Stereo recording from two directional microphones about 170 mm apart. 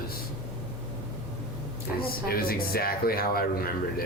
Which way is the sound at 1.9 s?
60° left (ahead or behind).